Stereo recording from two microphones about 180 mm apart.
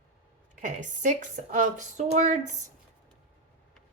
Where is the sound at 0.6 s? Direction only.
45° right (ahead or behind).